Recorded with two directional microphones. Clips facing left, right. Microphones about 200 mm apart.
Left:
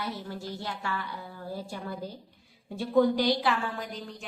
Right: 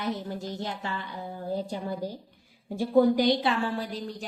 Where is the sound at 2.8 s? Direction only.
10° right (ahead or behind).